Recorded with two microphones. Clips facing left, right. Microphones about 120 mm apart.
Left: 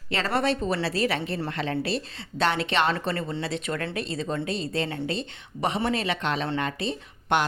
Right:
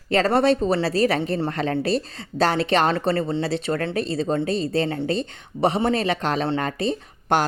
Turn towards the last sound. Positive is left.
turn(degrees=-40)  # may be behind; listen again after turning